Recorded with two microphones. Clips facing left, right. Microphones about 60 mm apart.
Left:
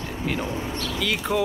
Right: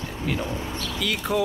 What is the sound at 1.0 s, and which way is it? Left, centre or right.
Speech, left.